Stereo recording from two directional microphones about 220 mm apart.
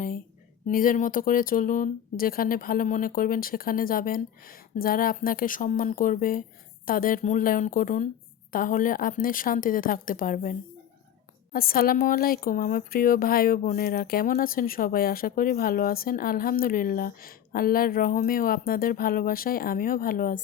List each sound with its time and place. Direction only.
0.7 s speech: 40° left (ahead or behind)